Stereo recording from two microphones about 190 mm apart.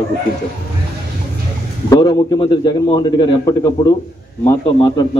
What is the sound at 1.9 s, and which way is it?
A man's voice, 20° left (ahead or behind).